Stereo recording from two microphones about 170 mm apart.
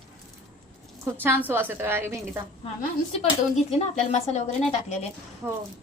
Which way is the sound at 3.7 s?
40° left (ahead or behind).